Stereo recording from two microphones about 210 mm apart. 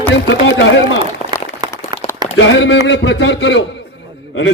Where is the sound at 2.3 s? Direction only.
60° left (ahead or behind).